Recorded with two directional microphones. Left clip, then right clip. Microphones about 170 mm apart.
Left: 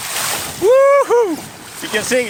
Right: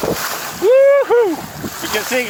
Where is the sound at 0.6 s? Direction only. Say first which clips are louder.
Even; 35° left (ahead or behind).